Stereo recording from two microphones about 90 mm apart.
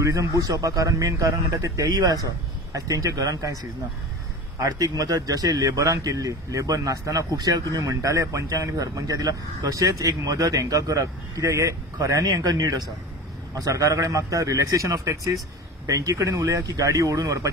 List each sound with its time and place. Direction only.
0.0 s speech: 40° right (ahead or behind)
4.6 s speech: 40° right (ahead or behind)